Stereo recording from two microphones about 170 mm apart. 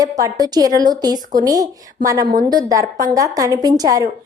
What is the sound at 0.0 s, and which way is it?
A woman's voice, 20° right (ahead or behind).